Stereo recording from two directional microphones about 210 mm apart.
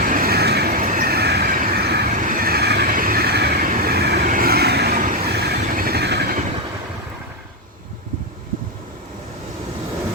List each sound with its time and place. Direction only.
0.0 s vehicle: 40° right (ahead or behind)